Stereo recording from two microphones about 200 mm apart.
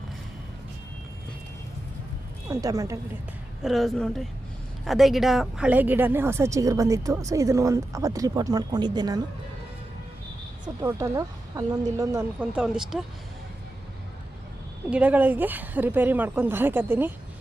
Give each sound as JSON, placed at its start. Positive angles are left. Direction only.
{"t": 2.5, "sound": "speech", "side_deg": -15}
{"t": 3.6, "sound": "a woman's voice", "side_deg": 0}
{"t": 10.8, "sound": "speech", "side_deg": -15}
{"t": 14.8, "sound": "speech", "side_deg": -5}